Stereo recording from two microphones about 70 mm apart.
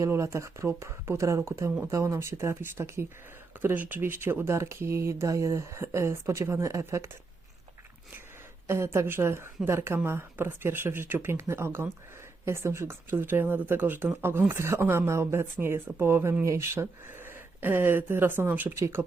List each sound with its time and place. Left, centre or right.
0.1 s speech: right
3.6 s speech: right
8.6 s speech: right